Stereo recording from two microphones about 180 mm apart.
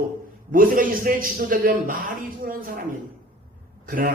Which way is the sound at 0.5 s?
50° right (ahead or behind).